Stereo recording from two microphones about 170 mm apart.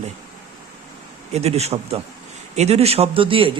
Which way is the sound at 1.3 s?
40° right (ahead or behind).